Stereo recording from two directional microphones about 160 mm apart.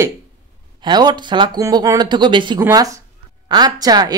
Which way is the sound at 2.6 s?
20° right (ahead or behind).